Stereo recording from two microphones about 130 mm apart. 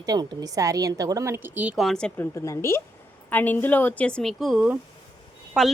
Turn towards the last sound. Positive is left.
turn(degrees=0)  # may be behind; listen again after turning